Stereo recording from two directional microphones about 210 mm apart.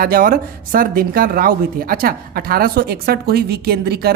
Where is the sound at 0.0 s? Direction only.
45° right (ahead or behind).